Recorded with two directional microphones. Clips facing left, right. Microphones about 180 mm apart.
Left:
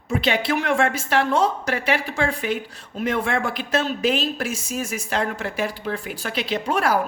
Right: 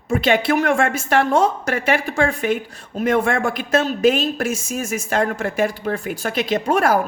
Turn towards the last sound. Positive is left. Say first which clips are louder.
# right 4 dB
turn(degrees=-45)  # may be behind; listen again after turning